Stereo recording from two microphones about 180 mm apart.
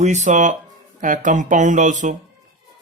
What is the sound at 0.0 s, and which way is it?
Speech, 40° right (ahead or behind).